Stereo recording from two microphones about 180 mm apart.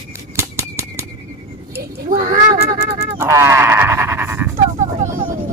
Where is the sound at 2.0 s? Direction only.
50° right (ahead or behind).